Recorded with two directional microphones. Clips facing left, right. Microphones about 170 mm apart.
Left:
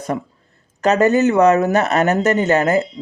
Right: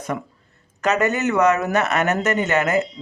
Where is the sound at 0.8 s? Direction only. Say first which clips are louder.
Left 6 dB; 35° left (ahead or behind).